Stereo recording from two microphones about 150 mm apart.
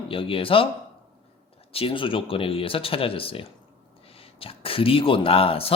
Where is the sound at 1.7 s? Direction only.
40° left (ahead or behind).